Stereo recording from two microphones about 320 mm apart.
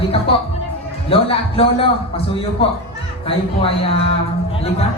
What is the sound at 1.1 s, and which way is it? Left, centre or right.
A man's voice, centre.